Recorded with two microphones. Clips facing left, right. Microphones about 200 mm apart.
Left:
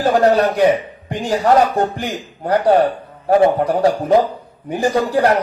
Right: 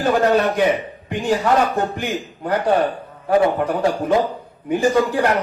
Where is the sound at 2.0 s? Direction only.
40° left (ahead or behind).